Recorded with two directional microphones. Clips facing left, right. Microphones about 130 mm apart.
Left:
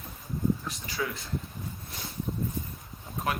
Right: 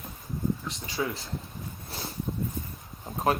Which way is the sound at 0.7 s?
25° right (ahead or behind).